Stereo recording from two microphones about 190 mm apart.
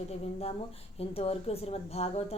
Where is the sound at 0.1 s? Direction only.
30° left (ahead or behind).